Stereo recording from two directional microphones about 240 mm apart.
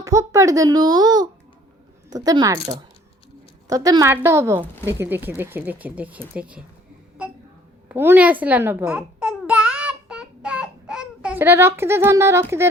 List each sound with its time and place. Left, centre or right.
0.0 s speech: centre
7.2 s a sound: centre
7.9 s babbling: centre